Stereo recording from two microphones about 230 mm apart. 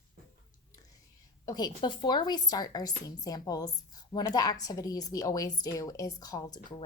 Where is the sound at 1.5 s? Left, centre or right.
Centre.